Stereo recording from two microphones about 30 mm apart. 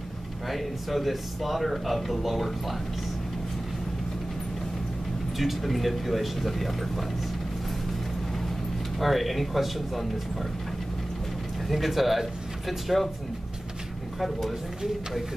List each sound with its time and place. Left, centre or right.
0.5 s speech: centre
5.4 s speech: centre
9.0 s speech: centre
11.6 s speech: centre